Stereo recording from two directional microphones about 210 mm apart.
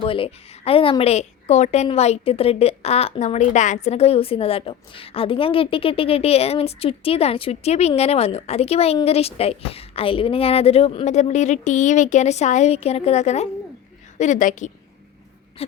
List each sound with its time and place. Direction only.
0.0 s a woman's voice: 25° left (ahead or behind)